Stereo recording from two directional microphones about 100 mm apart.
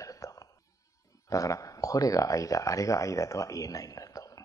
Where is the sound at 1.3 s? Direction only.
35° left (ahead or behind).